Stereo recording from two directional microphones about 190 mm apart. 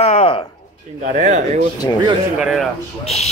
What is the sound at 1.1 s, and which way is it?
Speech, 40° right (ahead or behind).